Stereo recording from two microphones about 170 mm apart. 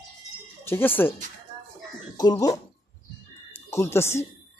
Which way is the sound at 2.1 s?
25° left (ahead or behind).